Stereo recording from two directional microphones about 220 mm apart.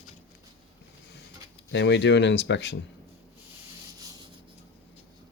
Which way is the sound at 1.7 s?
55° left (ahead or behind).